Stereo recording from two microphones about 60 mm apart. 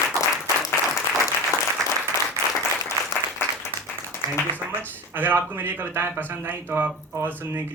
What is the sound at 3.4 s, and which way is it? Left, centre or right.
Applause, left.